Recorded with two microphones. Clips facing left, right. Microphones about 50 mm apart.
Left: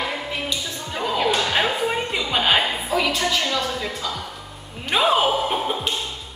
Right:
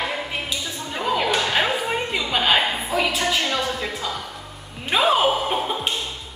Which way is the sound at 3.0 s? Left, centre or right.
Centre.